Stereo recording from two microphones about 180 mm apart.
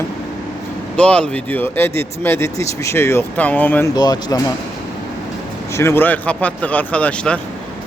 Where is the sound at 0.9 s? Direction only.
5° left (ahead or behind).